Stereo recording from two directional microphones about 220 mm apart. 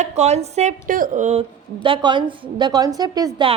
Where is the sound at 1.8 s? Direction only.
20° right (ahead or behind).